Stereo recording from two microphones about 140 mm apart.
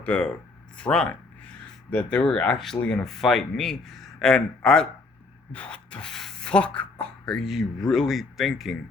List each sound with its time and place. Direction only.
0.0 s speech: 10° left (ahead or behind)